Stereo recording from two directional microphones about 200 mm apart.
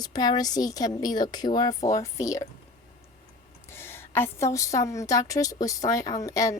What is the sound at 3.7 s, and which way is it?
A woman's voice, 10° left (ahead or behind).